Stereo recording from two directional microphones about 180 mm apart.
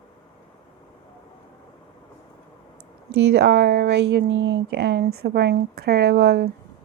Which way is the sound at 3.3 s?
75° right (ahead or behind).